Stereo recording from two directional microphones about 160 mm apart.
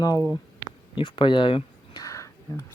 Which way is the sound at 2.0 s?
20° left (ahead or behind).